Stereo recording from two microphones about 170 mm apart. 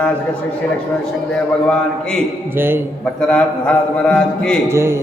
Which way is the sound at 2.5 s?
10° right (ahead or behind).